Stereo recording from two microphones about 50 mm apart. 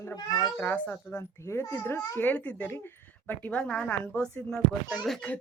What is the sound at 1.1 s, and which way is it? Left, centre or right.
Speech, left.